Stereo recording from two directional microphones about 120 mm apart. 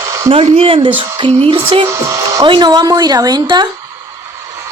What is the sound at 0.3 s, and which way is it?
Speech, 55° right (ahead or behind).